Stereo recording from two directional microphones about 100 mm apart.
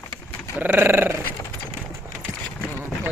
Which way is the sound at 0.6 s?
20° right (ahead or behind).